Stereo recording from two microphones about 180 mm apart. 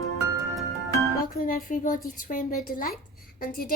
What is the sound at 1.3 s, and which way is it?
A woman's voice, 55° left (ahead or behind).